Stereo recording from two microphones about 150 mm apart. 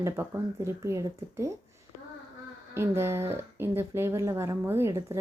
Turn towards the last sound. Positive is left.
turn(degrees=-20)  # may be behind; listen again after turning